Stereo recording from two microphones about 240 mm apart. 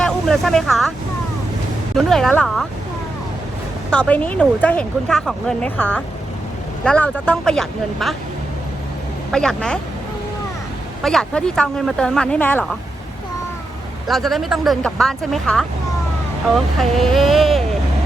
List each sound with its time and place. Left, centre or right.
0.0 s speech: centre
2.0 s speech: centre
3.9 s speech: centre
9.3 s speech: centre
11.0 s speech: centre
14.1 s speech: centre
16.7 s speech: centre